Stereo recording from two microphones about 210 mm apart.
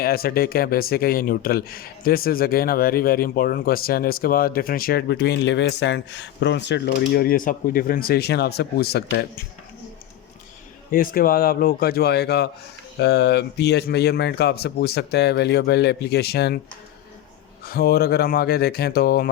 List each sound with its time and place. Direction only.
0.0 s speech: 45° left (ahead or behind)
10.9 s speech: 40° left (ahead or behind)
17.7 s speech: 45° left (ahead or behind)